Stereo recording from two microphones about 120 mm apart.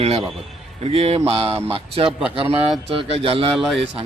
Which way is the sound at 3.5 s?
Centre (ahead or behind).